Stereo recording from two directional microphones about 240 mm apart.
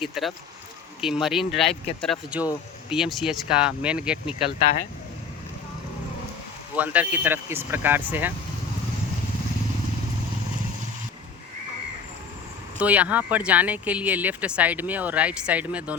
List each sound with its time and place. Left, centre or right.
0.0 s speech: centre
6.7 s speech: centre
12.8 s speech: centre